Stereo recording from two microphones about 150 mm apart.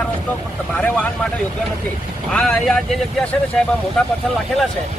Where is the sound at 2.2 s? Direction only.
Centre (ahead or behind).